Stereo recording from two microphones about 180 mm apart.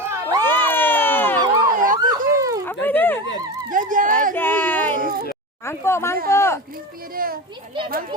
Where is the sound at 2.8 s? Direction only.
10° left (ahead or behind).